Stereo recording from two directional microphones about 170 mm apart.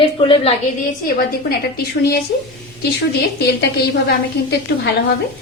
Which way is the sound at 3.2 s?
75° left (ahead or behind).